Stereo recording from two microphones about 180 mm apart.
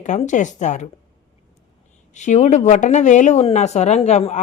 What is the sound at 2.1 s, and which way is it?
Speech, 40° left (ahead or behind).